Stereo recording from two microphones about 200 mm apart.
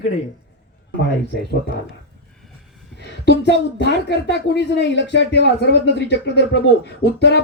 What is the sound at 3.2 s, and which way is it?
A woman's voice, 60° left (ahead or behind).